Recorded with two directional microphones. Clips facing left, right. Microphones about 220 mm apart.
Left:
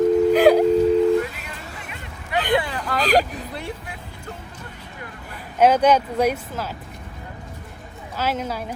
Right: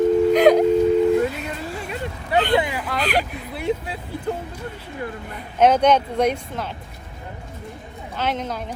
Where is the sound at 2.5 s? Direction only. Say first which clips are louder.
Left 2 dB; 20° right (ahead or behind).